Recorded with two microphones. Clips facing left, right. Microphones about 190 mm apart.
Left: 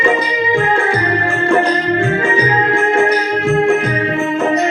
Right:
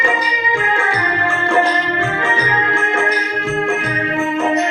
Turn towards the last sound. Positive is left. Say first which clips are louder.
# left 6 dB
turn(degrees=35)  # may be behind; listen again after turning